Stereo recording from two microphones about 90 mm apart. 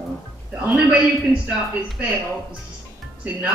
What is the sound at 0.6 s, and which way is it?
Speech, 15° right (ahead or behind).